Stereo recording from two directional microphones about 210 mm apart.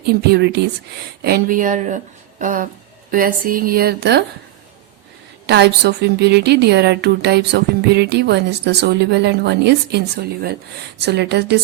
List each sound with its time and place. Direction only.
0.0 s a woman's voice: 50° right (ahead or behind)
5.5 s a woman's voice: 55° right (ahead or behind)
11.0 s a woman's voice: 55° right (ahead or behind)